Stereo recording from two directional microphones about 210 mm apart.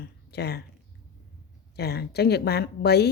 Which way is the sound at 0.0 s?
50° left (ahead or behind).